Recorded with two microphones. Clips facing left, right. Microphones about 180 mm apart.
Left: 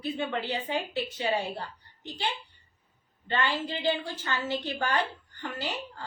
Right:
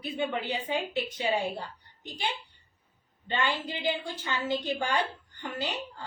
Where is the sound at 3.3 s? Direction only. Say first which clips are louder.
Left 1 dB; 15° right (ahead or behind).